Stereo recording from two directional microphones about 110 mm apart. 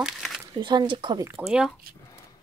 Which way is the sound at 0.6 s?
45° right (ahead or behind).